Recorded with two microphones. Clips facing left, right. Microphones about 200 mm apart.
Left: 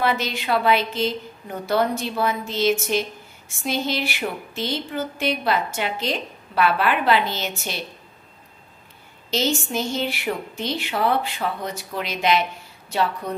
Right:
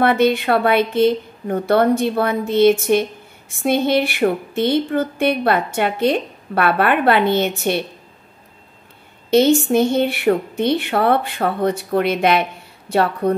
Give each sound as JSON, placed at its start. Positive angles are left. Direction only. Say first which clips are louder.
{"t": 0.0, "sound": "a woman's voice", "louder": "right 9 dB", "side_deg": -60}
{"t": 9.3, "sound": "a woman's voice", "louder": "right 11 dB", "side_deg": -60}